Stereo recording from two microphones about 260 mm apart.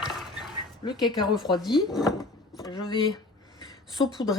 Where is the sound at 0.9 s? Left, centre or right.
Centre.